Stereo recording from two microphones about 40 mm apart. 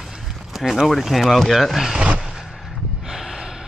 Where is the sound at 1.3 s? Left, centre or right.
Centre.